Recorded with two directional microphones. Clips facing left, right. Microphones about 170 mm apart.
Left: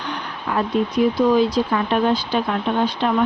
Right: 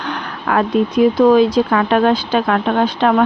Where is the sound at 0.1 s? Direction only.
75° right (ahead or behind).